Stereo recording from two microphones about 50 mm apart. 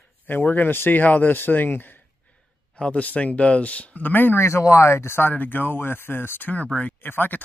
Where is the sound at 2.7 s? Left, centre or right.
Left.